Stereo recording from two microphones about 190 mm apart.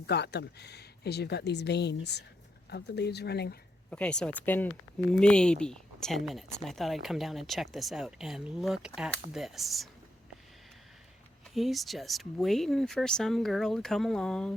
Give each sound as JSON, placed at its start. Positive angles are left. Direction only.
{"t": 0.1, "sound": "speech", "side_deg": 60}
{"t": 3.8, "sound": "speech", "side_deg": 5}
{"t": 11.5, "sound": "speech", "side_deg": 0}